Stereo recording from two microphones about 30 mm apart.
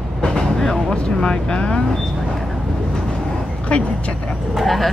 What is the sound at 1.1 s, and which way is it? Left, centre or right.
Vehicle, left.